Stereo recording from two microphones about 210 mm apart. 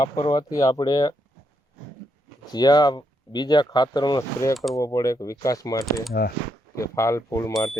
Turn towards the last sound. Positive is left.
turn(degrees=15)  # may be behind; listen again after turning